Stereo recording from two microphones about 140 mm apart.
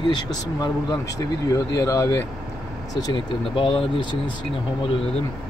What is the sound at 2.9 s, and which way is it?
Speech, 30° left (ahead or behind).